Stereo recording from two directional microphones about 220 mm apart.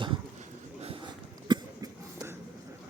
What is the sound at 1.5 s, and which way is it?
Cough, 15° right (ahead or behind).